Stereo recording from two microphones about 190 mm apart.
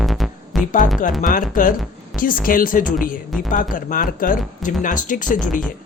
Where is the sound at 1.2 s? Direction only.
45° left (ahead or behind).